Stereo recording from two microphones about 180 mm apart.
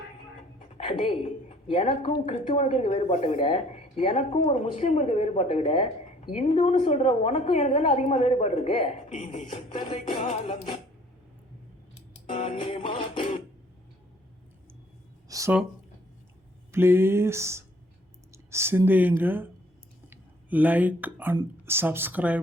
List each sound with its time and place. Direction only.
0.8 s a woman's voice: 30° left (ahead or behind)
11.9 s clicking: 45° left (ahead or behind)
12.4 s music: 30° left (ahead or behind)
15.3 s a sound: 15° right (ahead or behind)
16.7 s speech: 15° right (ahead or behind)